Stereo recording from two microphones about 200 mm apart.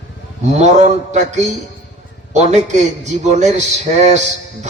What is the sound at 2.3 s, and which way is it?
Speech, 35° right (ahead or behind).